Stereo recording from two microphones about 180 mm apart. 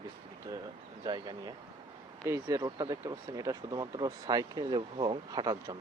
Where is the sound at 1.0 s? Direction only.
25° right (ahead or behind).